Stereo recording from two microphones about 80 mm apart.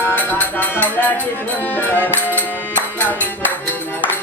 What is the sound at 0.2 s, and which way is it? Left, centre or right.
Speech, left.